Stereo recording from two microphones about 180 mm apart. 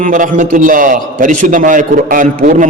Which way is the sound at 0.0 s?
45° right (ahead or behind).